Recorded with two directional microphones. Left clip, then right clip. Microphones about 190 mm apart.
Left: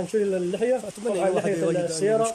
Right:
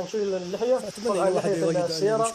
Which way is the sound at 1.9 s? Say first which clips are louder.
Left 1 dB; 20° left (ahead or behind).